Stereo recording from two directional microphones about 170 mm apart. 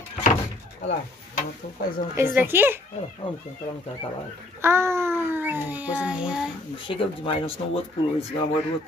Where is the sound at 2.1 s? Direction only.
10° right (ahead or behind).